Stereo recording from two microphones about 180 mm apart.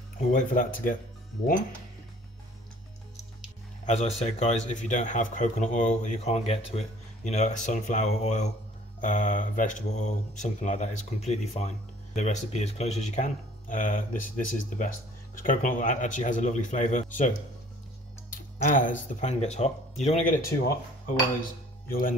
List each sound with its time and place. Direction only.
0.3 s speech: 45° left (ahead or behind)
3.8 s speech: 40° left (ahead or behind)
18.7 s speech: 45° left (ahead or behind)
21.8 s speech: 50° left (ahead or behind)